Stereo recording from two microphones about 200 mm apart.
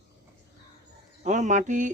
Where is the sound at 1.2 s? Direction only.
35° right (ahead or behind).